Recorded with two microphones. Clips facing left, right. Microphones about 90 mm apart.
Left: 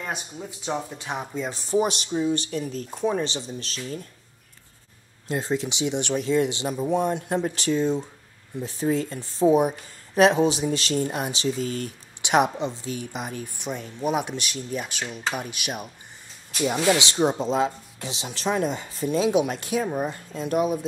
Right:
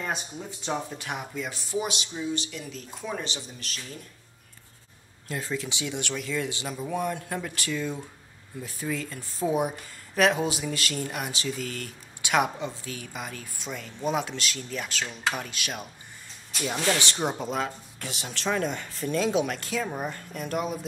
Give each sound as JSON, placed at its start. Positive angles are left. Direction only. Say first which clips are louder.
{"t": 0.0, "sound": "speech", "louder": "even", "side_deg": 5}
{"t": 0.9, "sound": "speech", "louder": "left 3 dB", "side_deg": 25}
{"t": 5.3, "sound": "speech", "louder": "left 6 dB", "side_deg": 25}